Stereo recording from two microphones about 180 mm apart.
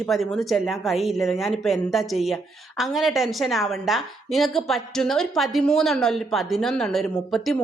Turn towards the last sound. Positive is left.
turn(degrees=0)  # may be behind; listen again after turning